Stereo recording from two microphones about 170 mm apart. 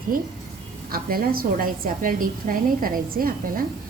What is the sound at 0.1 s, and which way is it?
A woman's voice, 55° right (ahead or behind).